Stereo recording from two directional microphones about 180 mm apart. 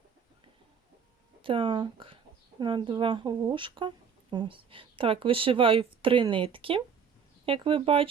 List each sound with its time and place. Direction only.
1.4 s speech: 30° right (ahead or behind)